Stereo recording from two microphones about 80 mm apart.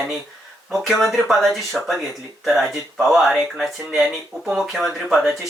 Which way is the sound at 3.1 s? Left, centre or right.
Centre.